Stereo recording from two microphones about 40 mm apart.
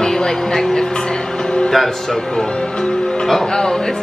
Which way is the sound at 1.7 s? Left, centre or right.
Centre.